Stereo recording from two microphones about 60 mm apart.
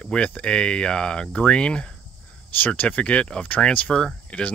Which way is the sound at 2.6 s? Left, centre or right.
Left.